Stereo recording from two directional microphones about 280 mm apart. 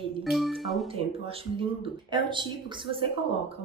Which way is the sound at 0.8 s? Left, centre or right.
Centre.